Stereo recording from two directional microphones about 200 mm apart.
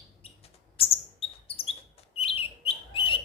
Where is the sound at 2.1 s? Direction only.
30° left (ahead or behind).